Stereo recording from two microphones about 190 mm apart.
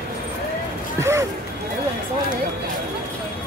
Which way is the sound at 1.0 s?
15° right (ahead or behind).